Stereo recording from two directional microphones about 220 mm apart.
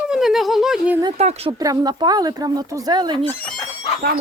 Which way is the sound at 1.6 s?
15° right (ahead or behind).